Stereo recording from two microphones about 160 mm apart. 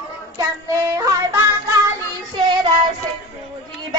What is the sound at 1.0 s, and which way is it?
Music, 20° right (ahead or behind).